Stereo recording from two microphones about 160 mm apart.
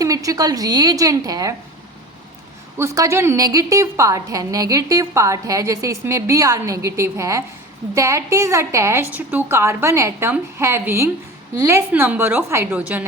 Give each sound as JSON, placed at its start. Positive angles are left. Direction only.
{"t": 0.0, "sound": "a woman's voice", "side_deg": -20}
{"t": 2.7, "sound": "a woman's voice", "side_deg": -20}